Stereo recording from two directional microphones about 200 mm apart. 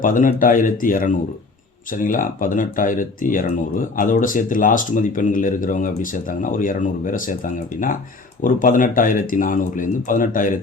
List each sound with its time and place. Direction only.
0.0 s speech: 40° left (ahead or behind)